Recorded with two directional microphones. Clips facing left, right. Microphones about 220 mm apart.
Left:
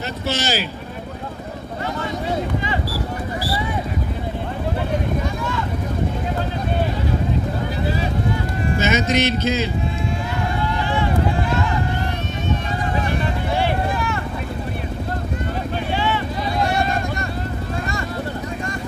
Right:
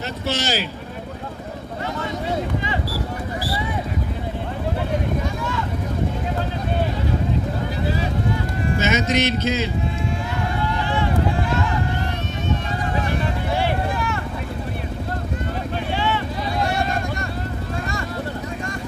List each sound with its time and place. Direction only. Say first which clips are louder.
0.3 s speech: left 1 dB; 5° left (ahead or behind)
8.7 s music: left 1 dB; 35° left (ahead or behind)
13.5 s vehicle: left 2 dB; centre (ahead or behind)
15.9 s vehicle: left 1 dB; 10° left (ahead or behind)